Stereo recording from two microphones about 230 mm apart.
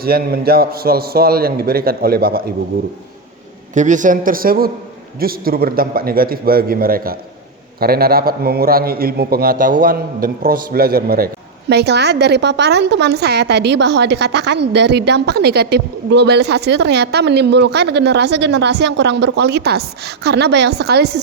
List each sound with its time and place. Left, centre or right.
0.0 s a man's voice: right
3.8 s a man's voice: right